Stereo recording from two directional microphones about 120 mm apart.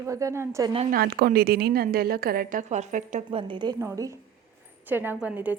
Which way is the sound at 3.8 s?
25° right (ahead or behind).